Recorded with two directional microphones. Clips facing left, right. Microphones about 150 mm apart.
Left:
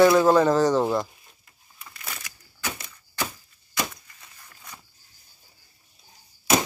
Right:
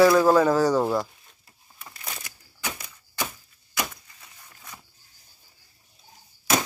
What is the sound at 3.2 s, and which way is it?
Chop, centre (ahead or behind).